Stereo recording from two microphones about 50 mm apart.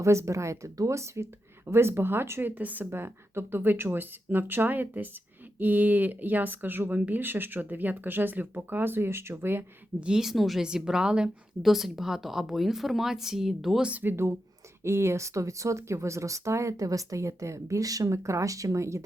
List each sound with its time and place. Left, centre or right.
0.0 s speech: right
1.6 s speech: right
2.4 s speech: right
2.8 s speech: right
10.2 s speech: centre
10.6 s a woman's voice: centre
11.6 s a woman's voice: centre
14.0 s speech: right
14.8 s speech: right